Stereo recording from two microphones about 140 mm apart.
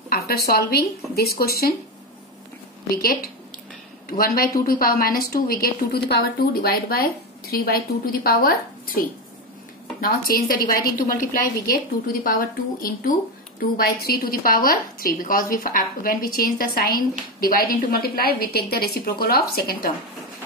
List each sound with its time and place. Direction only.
0.1 s a woman's voice: 90° left
2.9 s a woman's voice: 90° left
9.9 s a woman's voice: 90° left